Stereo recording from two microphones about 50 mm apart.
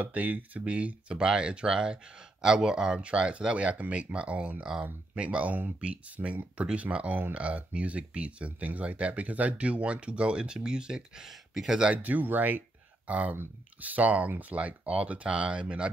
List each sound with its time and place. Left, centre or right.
0.0 s speech: right; by 11.8 s centre
11.9 s speech: right